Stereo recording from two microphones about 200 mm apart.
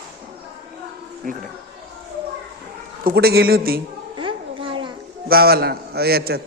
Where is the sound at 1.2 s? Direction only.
45° right (ahead or behind).